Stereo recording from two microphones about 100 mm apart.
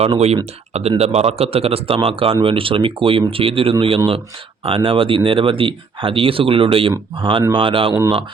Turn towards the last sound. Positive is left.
turn(degrees=-60)  # may be behind; listen again after turning